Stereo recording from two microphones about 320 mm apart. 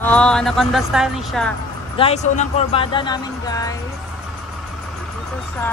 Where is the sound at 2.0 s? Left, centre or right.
Centre.